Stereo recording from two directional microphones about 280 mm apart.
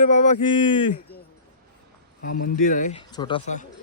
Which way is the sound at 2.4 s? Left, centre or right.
Left.